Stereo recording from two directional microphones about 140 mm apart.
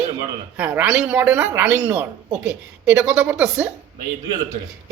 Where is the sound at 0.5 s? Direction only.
10° right (ahead or behind).